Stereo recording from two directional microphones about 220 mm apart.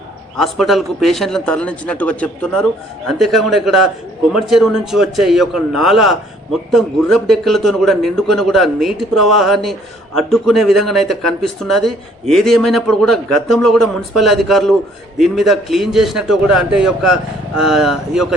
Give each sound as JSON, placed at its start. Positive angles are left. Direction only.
{"t": 0.3, "sound": "a man's voice", "side_deg": 0}